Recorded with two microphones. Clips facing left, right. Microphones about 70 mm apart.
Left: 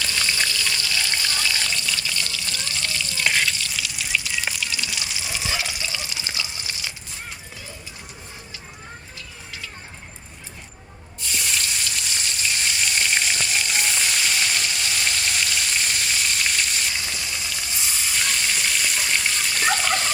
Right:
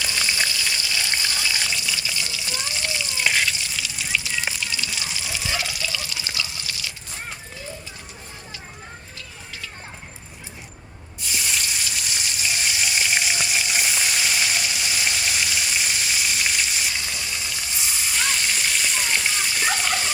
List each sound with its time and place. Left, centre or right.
0.0 s frying: centre
3.2 s frying: centre
3.7 s water: centre
5.5 s water: centre
11.3 s frying: centre